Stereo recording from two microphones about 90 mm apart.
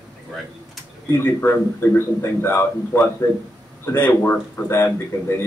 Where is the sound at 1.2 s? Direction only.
25° left (ahead or behind).